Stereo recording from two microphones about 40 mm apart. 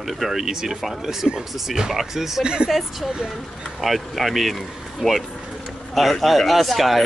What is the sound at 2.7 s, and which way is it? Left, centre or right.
Speech, centre.